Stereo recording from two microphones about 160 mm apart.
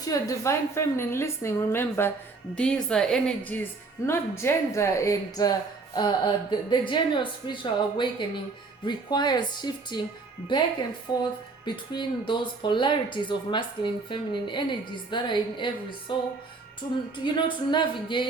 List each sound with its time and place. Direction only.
0.0 s a woman's voice: 20° left (ahead or behind)
11.6 s a woman's voice: 30° left (ahead or behind)